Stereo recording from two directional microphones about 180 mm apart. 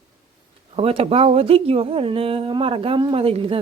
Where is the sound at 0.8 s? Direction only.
35° right (ahead or behind).